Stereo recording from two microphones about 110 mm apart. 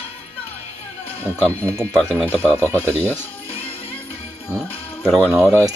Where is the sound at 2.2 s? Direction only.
15° left (ahead or behind).